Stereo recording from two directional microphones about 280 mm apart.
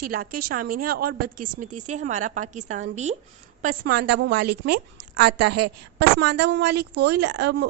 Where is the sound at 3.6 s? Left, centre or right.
Right.